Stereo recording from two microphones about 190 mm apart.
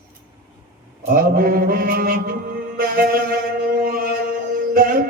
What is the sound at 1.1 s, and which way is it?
Mantra, 50° right (ahead or behind).